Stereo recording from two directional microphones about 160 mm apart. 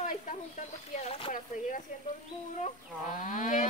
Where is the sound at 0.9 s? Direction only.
40° left (ahead or behind).